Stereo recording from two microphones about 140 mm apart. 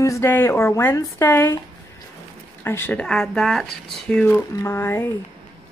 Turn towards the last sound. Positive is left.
turn(degrees=15)  # may be behind; listen again after turning